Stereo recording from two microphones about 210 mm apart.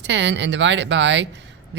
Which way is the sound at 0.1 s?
55° right (ahead or behind).